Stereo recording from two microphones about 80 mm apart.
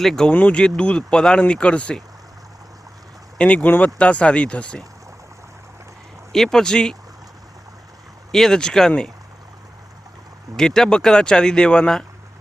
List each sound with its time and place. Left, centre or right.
0.0 s speech: centre
0.3 s speech: centre
3.3 s speech: centre
6.3 s speech: centre
8.3 s speech: centre
10.6 s speech: centre